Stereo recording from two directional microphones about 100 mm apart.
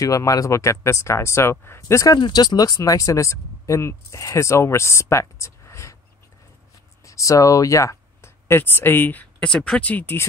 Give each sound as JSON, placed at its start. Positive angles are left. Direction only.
{"t": 0.0, "sound": "speech", "side_deg": 35}
{"t": 2.1, "sound": "speech", "side_deg": 50}
{"t": 7.1, "sound": "speech", "side_deg": 35}